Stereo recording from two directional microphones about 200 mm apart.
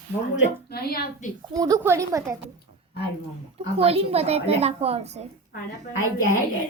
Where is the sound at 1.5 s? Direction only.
15° right (ahead or behind).